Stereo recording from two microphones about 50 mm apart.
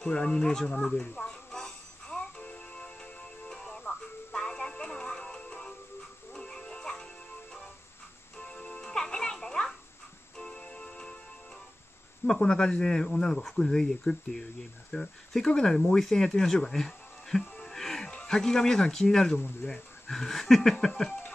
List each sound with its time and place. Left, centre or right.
0.0 s speech: centre
1.1 s music: centre
8.4 s music: left
12.3 s speech: centre
16.7 s music: centre
18.1 s speech: centre
19.6 s speech: left
20.1 s speech: centre